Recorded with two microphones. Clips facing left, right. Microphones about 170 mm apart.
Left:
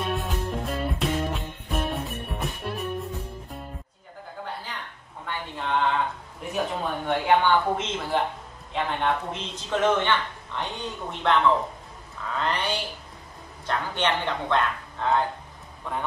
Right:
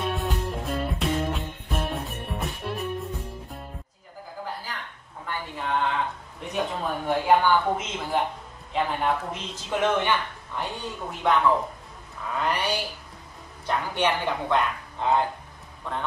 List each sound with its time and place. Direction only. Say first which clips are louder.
0.0 s music: even; centre (ahead or behind)
5.2 s a sound: even; 5° right (ahead or behind)
6.4 s a woman's voice: even; centre (ahead or behind); by 15.2 s 15° right (ahead or behind)